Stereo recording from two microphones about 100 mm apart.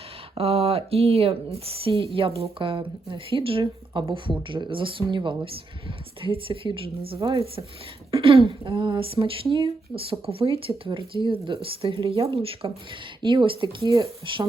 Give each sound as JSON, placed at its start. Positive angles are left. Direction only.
{"t": 0.3, "sound": "speech", "side_deg": -75}
{"t": 13.2, "sound": "speech", "side_deg": -55}
{"t": 13.8, "sound": "speech", "side_deg": -35}